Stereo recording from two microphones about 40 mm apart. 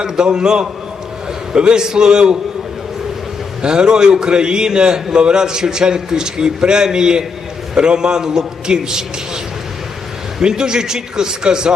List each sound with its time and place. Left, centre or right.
0.0 s a man's voice: centre
3.6 s a man's voice: right
10.4 s a man's voice: centre